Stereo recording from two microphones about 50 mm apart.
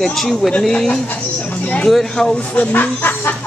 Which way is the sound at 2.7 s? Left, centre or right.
Left.